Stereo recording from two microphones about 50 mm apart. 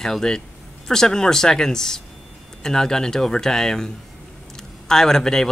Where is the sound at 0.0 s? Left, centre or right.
Centre.